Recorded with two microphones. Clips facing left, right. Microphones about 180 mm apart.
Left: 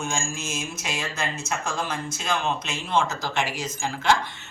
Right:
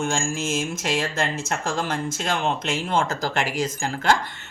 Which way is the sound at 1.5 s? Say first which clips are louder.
Right 3 dB; 50° right (ahead or behind).